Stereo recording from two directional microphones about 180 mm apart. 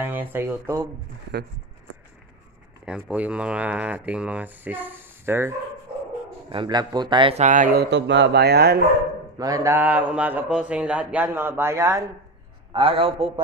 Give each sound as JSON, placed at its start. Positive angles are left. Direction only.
{"t": 0.0, "sound": "speech", "side_deg": -10}
{"t": 2.8, "sound": "speech", "side_deg": -5}
{"t": 6.5, "sound": "a man's voice", "side_deg": -25}
{"t": 7.4, "sound": "speech", "side_deg": -45}
{"t": 9.4, "sound": "speech", "side_deg": -20}
{"t": 12.7, "sound": "a man's voice", "side_deg": -30}